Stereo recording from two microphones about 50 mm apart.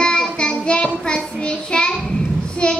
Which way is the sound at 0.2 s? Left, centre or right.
Centre.